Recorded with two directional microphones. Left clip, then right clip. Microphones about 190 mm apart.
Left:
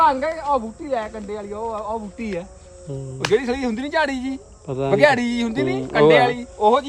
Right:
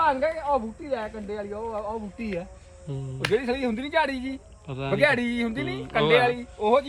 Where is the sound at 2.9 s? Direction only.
10° left (ahead or behind).